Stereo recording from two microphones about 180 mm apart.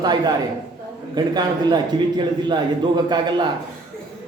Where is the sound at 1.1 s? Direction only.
20° right (ahead or behind).